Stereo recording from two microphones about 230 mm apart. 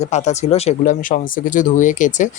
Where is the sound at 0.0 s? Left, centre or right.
Left.